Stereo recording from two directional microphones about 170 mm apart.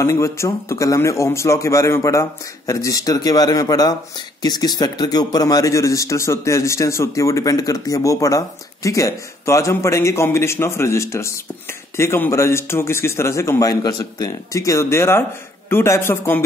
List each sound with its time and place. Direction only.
0.0 s a man's voice: 15° left (ahead or behind)